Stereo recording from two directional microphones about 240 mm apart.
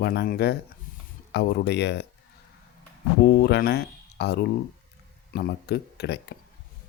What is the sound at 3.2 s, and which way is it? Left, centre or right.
Speech, left.